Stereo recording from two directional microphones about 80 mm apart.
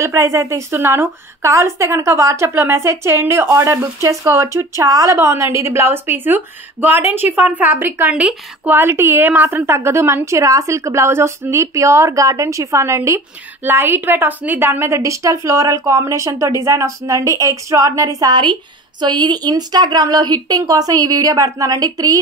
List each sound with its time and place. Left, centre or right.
0.0 s a woman's voice: right
8.1 s speech: centre
8.7 s a woman's voice: right
18.3 s a woman's voice: right